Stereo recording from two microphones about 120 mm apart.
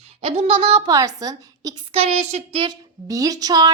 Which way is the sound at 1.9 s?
55° right (ahead or behind).